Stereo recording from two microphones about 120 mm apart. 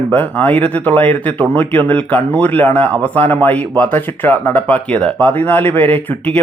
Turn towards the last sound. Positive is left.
turn(degrees=15)  # may be behind; listen again after turning